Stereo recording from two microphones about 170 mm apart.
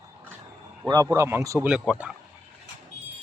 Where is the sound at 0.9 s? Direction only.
20° right (ahead or behind).